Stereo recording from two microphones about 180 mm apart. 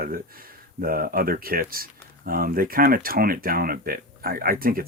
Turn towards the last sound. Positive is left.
turn(degrees=-55)  # may be behind; listen again after turning